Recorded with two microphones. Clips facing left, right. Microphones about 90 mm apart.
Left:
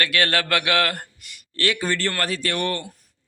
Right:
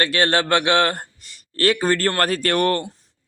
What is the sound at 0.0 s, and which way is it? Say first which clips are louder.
A man's voice: right 3 dB; 30° right (ahead or behind).